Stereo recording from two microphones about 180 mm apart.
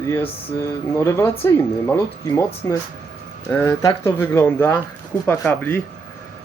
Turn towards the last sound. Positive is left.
turn(degrees=10)  # may be behind; listen again after turning